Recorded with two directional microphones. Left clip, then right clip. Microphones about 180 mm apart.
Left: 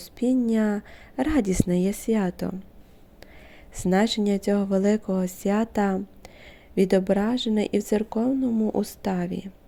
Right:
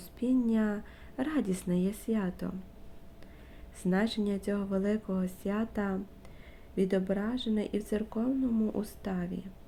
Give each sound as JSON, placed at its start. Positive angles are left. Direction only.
{"t": 0.0, "sound": "a sound", "side_deg": 40}
{"t": 0.4, "sound": "speech", "side_deg": 40}
{"t": 3.8, "sound": "speech", "side_deg": 40}